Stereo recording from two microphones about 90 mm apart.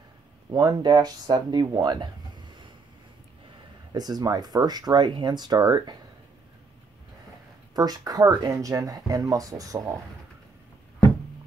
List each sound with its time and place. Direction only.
0.5 s speech: 45° right (ahead or behind)
3.9 s speech: 45° right (ahead or behind)
7.7 s speech: 45° right (ahead or behind)